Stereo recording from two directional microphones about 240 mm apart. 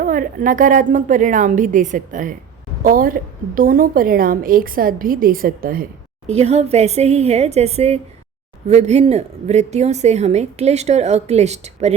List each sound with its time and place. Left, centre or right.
0.0 s a woman's voice: right